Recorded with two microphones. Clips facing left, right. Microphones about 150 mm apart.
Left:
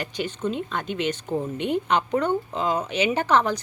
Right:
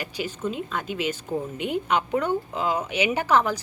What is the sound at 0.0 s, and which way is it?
Speech, 5° right (ahead or behind).